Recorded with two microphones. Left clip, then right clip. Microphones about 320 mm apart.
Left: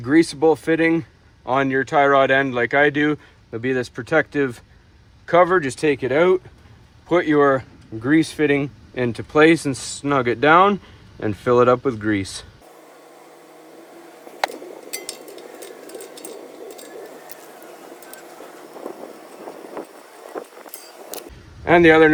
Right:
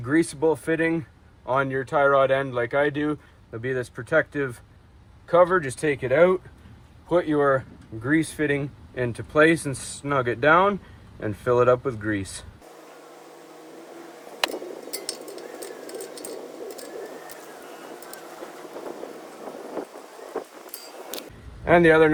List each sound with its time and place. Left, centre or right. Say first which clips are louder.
0.0 s speech: left 6 dB; left
14.6 s glass: left 1 dB; centre
16.6 s vehicle: even; centre
21.6 s speech: left 4 dB; left